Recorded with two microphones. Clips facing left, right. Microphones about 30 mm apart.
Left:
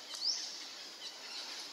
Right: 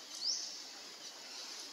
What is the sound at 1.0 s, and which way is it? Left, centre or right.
Squeal, left.